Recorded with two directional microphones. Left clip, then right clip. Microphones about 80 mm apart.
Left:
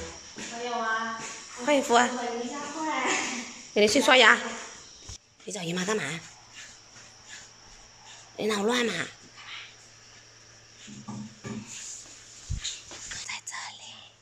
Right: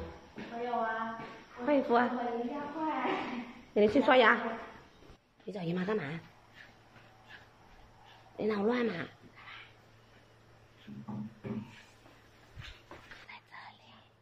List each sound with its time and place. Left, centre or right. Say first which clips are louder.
0.4 s a sound: left 3 dB; centre
3.7 s speech: left 5 dB; centre
8.4 s speech: left 5 dB; centre
13.1 s whispering: left 15 dB; left